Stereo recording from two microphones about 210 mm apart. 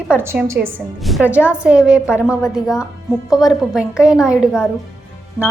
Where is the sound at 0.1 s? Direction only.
10° right (ahead or behind).